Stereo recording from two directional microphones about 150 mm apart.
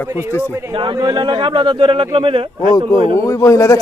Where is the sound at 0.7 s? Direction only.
35° right (ahead or behind).